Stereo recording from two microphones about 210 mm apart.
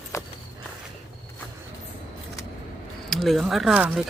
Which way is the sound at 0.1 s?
15° left (ahead or behind).